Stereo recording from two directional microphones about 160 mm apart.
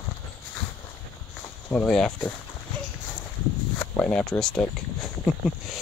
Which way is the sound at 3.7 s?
10° left (ahead or behind).